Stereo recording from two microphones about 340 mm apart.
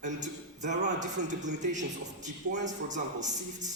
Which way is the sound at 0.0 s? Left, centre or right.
Right.